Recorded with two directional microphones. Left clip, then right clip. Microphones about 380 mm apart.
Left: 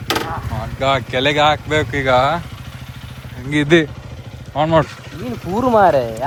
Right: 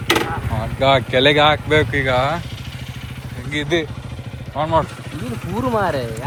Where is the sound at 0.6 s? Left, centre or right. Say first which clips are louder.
Right 2 dB; centre.